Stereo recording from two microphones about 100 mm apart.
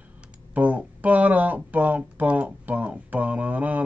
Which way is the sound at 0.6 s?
15° right (ahead or behind).